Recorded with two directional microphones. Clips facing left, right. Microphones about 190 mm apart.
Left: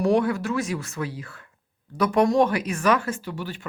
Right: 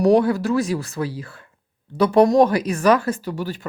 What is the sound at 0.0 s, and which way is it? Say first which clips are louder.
Speech: right 5 dB; 35° right (ahead or behind).